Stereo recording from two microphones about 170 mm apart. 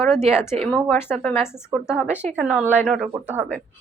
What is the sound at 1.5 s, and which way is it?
Speech, 15° left (ahead or behind).